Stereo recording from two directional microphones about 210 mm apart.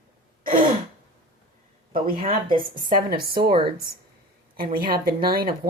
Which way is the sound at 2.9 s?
45° right (ahead or behind).